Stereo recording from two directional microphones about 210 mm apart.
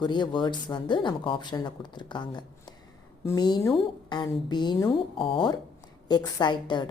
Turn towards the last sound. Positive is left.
turn(degrees=20)  # may be behind; listen again after turning